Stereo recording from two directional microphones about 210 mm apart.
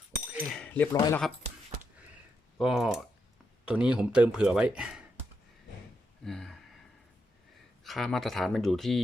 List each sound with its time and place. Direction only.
0.3 s cutlery: 5° right (ahead or behind)
0.9 s speech: 20° left (ahead or behind)
2.6 s speech: centre (ahead or behind)
6.2 s speech: centre (ahead or behind)
7.9 s speech: centre (ahead or behind)